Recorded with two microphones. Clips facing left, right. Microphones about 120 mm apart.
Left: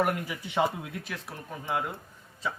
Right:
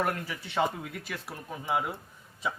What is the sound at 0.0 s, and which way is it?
Speech, 10° left (ahead or behind).